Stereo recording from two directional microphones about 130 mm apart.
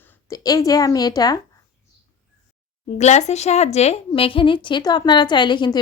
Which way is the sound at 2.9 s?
60° left (ahead or behind).